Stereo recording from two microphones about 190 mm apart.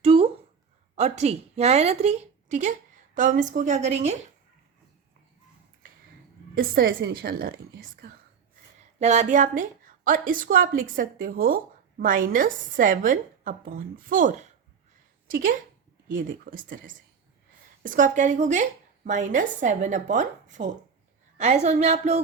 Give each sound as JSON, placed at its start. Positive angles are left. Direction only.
{"t": 0.0, "sound": "a sound", "side_deg": -30}
{"t": 0.9, "sound": "a woman's voice", "side_deg": -35}
{"t": 6.5, "sound": "a woman's voice", "side_deg": -50}
{"t": 9.0, "sound": "a woman's voice", "side_deg": -35}